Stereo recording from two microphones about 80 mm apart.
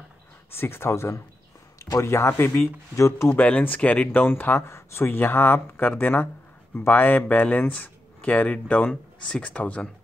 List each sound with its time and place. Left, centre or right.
0.6 s speech: left
3.0 s speech: left
3.3 s speech: centre